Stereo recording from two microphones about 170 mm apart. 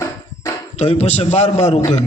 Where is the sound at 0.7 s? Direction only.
40° left (ahead or behind).